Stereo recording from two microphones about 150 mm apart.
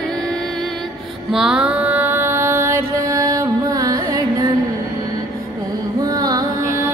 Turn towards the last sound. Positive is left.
turn(degrees=-20)  # may be behind; listen again after turning